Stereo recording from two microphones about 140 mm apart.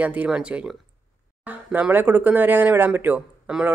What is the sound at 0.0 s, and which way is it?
Speech, 10° right (ahead or behind).